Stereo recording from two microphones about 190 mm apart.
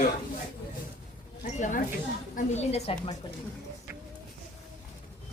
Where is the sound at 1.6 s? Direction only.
45° left (ahead or behind).